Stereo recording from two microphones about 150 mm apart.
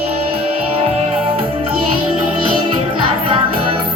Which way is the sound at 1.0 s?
40° right (ahead or behind).